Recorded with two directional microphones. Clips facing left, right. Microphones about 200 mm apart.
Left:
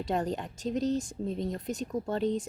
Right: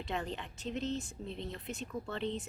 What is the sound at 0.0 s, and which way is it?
Speech, 40° left (ahead or behind).